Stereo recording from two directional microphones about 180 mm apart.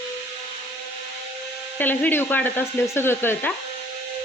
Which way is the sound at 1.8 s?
10° left (ahead or behind).